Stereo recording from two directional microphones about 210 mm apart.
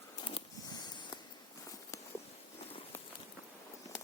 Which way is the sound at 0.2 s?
20° left (ahead or behind).